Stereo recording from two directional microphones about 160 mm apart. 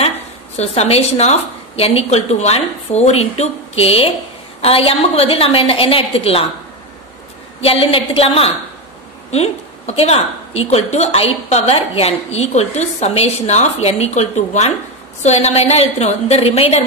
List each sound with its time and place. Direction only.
0.6 s a woman's voice: 40° left (ahead or behind)
7.6 s a woman's voice: 35° left (ahead or behind)